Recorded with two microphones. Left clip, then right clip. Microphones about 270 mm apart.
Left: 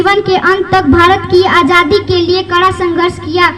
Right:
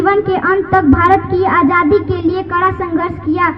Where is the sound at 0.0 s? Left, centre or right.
Left.